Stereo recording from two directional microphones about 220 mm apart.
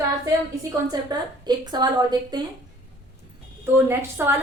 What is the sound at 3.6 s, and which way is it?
Speech, 10° right (ahead or behind).